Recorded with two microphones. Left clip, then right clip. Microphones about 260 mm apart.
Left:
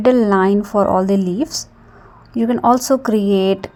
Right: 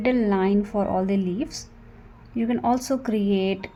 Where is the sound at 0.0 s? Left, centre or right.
Left.